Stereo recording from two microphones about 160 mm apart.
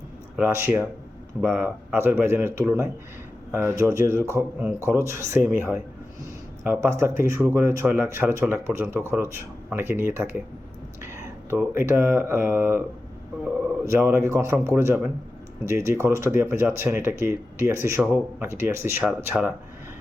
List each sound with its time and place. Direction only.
0.3 s speech: 10° right (ahead or behind)
6.7 s speech: 15° right (ahead or behind)
11.5 s speech: 15° right (ahead or behind)
14.0 s speech: 15° right (ahead or behind)